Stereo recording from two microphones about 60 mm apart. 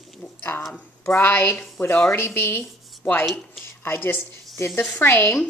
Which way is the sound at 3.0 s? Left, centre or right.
Left.